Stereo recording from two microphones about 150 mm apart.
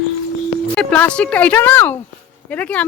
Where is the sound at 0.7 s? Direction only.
10° left (ahead or behind).